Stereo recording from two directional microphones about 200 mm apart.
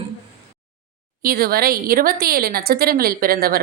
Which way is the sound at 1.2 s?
45° right (ahead or behind).